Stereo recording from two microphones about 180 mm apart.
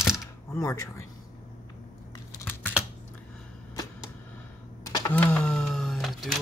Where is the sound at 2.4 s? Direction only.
10° left (ahead or behind).